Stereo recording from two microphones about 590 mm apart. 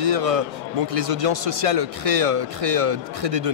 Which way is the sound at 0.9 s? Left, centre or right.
Right.